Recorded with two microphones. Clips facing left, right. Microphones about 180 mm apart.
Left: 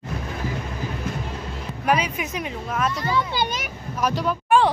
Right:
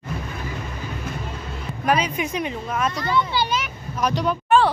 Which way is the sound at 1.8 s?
10° left (ahead or behind).